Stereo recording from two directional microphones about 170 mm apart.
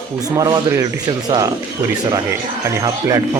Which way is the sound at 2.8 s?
20° right (ahead or behind).